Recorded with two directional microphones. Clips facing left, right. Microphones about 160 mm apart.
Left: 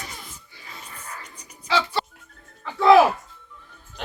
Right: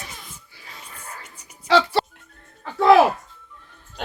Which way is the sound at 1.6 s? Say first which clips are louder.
Right 6 dB; 65° right (ahead or behind).